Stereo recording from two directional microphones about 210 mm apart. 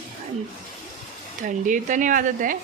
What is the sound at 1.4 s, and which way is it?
Speech, 40° right (ahead or behind).